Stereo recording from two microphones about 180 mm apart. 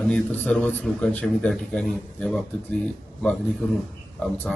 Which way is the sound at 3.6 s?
5° left (ahead or behind).